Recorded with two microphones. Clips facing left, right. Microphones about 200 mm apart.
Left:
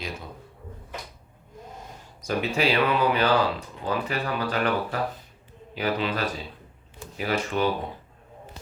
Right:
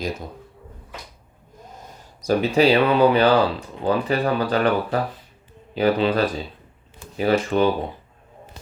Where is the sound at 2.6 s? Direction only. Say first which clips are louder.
Right 7 dB; 35° right (ahead or behind).